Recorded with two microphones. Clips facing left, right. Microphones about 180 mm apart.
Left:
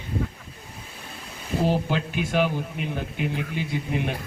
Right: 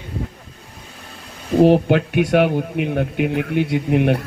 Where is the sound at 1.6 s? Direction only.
65° right (ahead or behind).